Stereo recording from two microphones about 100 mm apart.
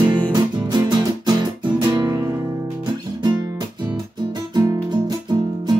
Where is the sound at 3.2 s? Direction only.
45° right (ahead or behind).